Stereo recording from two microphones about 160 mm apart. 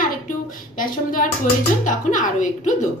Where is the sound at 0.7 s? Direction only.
60° left (ahead or behind).